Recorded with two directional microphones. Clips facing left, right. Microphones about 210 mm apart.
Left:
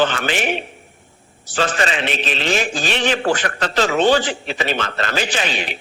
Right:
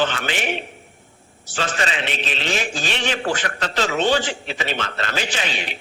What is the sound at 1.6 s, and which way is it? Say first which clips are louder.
Speech: left 5 dB; 45° left (ahead or behind).